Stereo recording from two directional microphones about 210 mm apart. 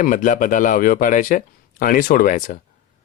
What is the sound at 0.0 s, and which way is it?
Speech, 40° left (ahead or behind).